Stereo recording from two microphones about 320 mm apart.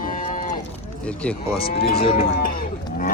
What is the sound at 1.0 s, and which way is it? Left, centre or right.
Speech, centre.